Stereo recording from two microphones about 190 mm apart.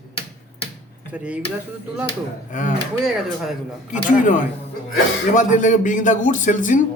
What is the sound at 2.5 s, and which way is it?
Speech, 40° left (ahead or behind).